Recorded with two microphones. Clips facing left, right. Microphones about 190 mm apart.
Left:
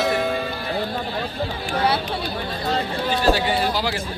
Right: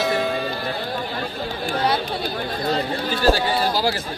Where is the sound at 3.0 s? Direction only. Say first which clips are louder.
Even; 40° right (ahead or behind).